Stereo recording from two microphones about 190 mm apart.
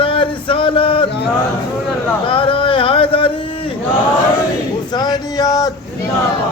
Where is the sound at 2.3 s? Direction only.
30° left (ahead or behind).